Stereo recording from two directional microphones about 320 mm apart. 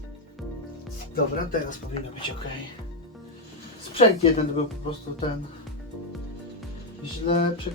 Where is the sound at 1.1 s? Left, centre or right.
Left.